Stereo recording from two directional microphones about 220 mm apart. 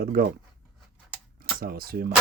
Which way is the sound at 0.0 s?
40° right (ahead or behind).